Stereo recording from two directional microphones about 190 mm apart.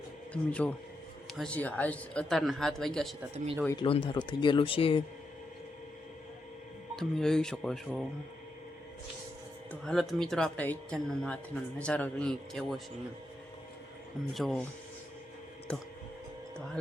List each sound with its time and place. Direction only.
0.6 s speech: 5° left (ahead or behind)
3.3 s speech: 30° right (ahead or behind)
3.7 s speech: 25° left (ahead or behind)
6.9 s speech: 5° left (ahead or behind)
9.8 s speech: centre (ahead or behind)
14.3 s speech: centre (ahead or behind)
15.7 s speech: 5° left (ahead or behind)